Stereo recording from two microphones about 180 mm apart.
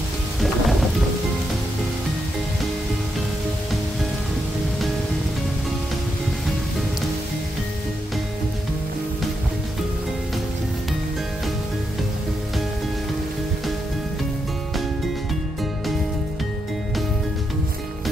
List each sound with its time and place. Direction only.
0.4 s thunder: centre (ahead or behind)